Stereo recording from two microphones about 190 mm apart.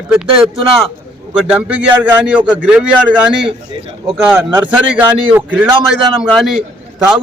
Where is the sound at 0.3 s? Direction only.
30° right (ahead or behind).